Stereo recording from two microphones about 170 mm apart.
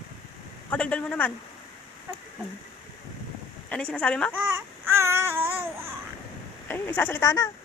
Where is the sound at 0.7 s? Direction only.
5° left (ahead or behind).